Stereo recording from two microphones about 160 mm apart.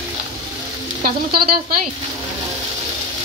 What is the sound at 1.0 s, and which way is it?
Speech, 70° right (ahead or behind).